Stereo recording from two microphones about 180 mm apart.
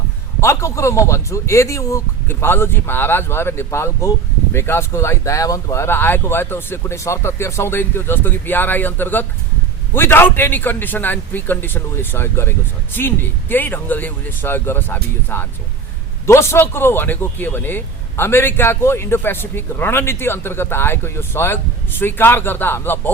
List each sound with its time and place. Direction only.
0.4 s a man's voice: 15° left (ahead or behind)